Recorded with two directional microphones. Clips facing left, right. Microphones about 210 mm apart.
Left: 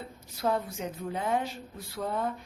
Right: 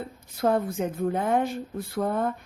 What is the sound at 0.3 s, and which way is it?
Speech, 50° right (ahead or behind).